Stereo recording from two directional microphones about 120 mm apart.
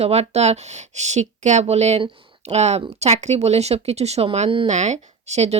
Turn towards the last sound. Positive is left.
turn(degrees=-65)  # may be behind; listen again after turning